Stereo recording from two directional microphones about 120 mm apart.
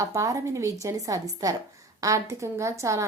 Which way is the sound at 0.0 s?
25° right (ahead or behind).